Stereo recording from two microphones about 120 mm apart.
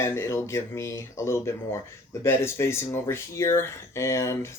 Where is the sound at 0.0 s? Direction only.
20° left (ahead or behind).